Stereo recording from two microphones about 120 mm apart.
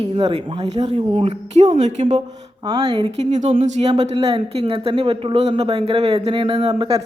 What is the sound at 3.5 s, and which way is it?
Speech, 85° right.